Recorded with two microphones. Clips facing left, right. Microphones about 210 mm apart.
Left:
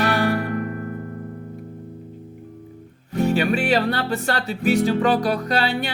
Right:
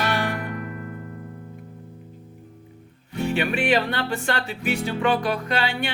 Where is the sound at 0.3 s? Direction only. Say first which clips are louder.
Left 7 dB; 55° left (ahead or behind).